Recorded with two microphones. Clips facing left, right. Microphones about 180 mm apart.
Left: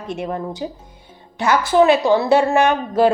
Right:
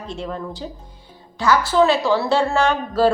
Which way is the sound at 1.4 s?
20° left (ahead or behind).